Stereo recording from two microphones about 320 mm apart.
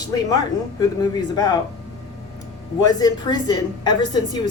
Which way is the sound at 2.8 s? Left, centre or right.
Centre.